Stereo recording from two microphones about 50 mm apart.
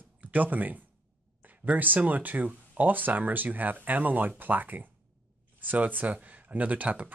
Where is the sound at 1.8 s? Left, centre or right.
Right.